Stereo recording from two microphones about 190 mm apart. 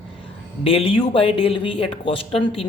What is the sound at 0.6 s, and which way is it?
Speech, 30° left (ahead or behind).